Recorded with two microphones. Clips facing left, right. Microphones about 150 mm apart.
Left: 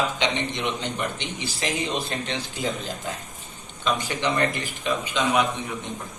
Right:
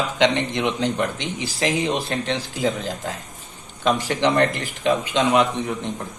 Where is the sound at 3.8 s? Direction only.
70° right (ahead or behind).